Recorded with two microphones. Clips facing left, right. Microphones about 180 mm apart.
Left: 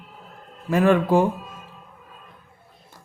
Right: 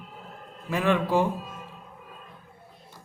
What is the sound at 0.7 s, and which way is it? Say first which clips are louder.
Speech: left 6 dB; 45° left (ahead or behind).